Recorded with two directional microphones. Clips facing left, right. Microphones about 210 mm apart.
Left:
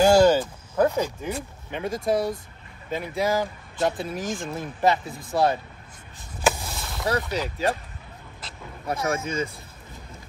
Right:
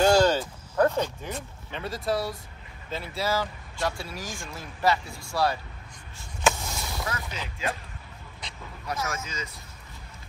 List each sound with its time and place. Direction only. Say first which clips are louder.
0.0 s speech: left 4 dB; 10° left (ahead or behind)
1.7 s speech: left 4 dB; 15° left (ahead or behind)
6.6 s a sound: even; centre (ahead or behind)
7.1 s speech: left 9 dB; 35° left (ahead or behind)
8.8 s speech: left 5 dB; 30° left (ahead or behind)
9.1 s speech: left 9 dB; 55° left (ahead or behind)